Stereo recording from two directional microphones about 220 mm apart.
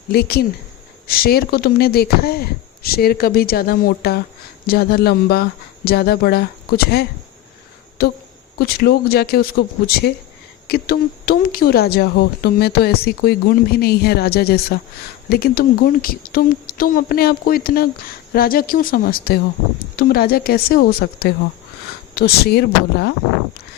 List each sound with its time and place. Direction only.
0.1 s speech: 45° left (ahead or behind)